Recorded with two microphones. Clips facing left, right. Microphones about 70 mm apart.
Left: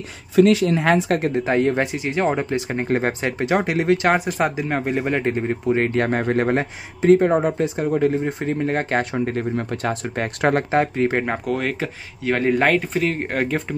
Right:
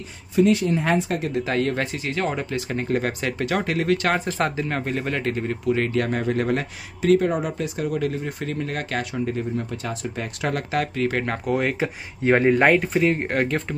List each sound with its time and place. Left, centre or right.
0.4 s speech: left
1.4 s speech: left
9.1 s speech: left
10.7 s speech: left
11.4 s speech: centre